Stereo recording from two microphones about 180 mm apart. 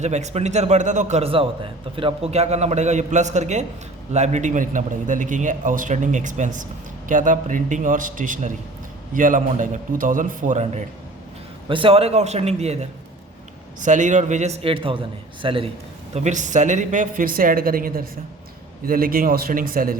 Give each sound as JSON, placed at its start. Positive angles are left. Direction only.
{"t": 0.0, "sound": "a man's voice", "side_deg": -40}
{"t": 11.7, "sound": "a man's voice", "side_deg": -30}
{"t": 16.1, "sound": "a man's voice", "side_deg": -40}